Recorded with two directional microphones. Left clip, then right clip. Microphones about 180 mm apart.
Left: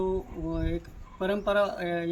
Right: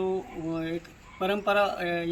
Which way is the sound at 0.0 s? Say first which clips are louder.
Even; 15° left (ahead or behind).